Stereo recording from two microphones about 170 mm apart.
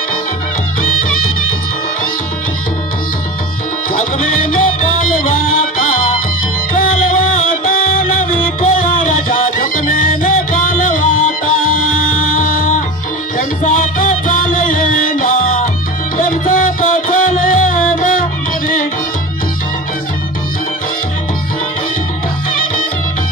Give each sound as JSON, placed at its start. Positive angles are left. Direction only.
{"t": 0.8, "sound": "music", "side_deg": 55}
{"t": 3.9, "sound": "music", "side_deg": 50}